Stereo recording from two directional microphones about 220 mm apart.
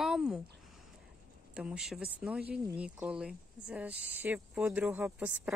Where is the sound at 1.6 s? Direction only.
5° right (ahead or behind).